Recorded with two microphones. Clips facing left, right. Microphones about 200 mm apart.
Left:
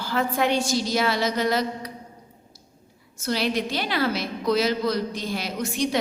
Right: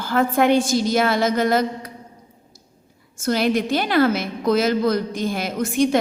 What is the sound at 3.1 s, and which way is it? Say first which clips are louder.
A woman's voice: right 5 dB; 50° right (ahead or behind).